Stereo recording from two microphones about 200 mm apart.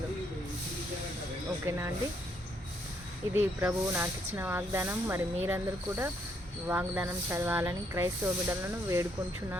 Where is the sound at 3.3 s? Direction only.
10° right (ahead or behind).